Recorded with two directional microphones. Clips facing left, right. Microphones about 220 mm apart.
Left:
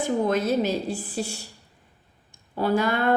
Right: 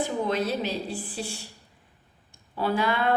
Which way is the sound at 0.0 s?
45° left (ahead or behind).